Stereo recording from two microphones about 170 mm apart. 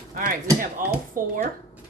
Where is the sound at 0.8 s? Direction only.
50° right (ahead or behind).